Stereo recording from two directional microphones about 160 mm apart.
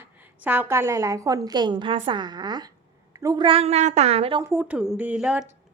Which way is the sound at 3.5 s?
40° right (ahead or behind).